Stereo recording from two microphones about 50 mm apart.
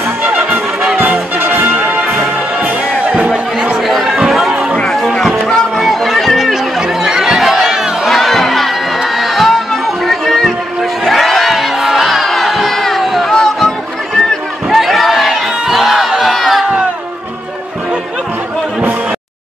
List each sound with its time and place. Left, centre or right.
0.2 s music: right
1.8 s music: right
3.8 s chatter: centre
4.5 s music: centre
4.7 s music: centre
5.8 s chatter: centre
8.1 s crowd: centre
10.0 s music: centre
12.3 s crowd: centre
13.3 s a sound: centre
15.6 s music: centre